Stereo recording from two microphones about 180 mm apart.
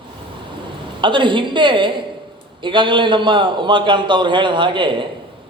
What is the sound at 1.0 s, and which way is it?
A man's voice, 25° right (ahead or behind).